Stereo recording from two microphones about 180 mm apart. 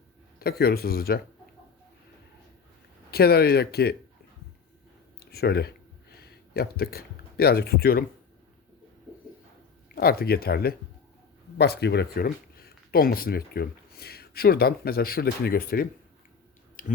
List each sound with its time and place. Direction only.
0.3 s speech: 60° left (ahead or behind)
3.1 s speech: 60° left (ahead or behind)
5.2 s speech: 60° left (ahead or behind)
9.9 s speech: 55° left (ahead or behind)
16.8 s a sound: 50° left (ahead or behind)